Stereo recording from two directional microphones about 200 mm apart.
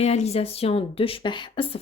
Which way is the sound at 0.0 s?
30° left (ahead or behind).